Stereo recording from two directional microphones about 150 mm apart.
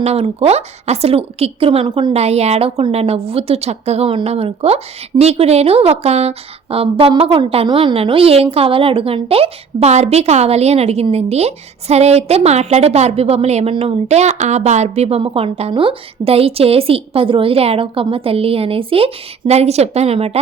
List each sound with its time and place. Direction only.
0.0 s a woman's voice: 45° right (ahead or behind)